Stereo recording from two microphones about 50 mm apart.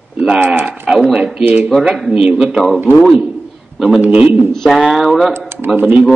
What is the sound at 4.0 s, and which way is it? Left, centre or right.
Speech, right.